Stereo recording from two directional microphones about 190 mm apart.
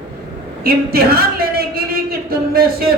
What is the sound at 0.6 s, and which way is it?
Speech, 55° right (ahead or behind).